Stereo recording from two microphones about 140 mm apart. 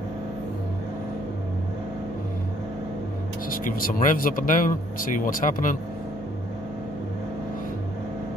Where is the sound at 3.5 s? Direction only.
85° left.